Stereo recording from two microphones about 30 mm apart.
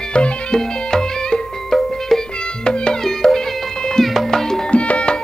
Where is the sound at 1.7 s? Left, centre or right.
Centre.